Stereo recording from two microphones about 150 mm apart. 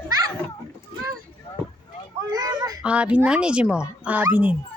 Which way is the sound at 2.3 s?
25° right (ahead or behind).